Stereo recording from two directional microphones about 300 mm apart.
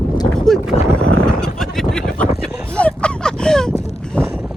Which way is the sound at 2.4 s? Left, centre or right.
Centre.